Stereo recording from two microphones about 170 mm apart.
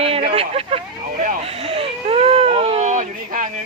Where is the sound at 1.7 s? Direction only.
35° right (ahead or behind).